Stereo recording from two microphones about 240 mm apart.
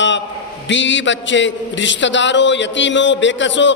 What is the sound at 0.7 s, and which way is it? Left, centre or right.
A man's voice, left.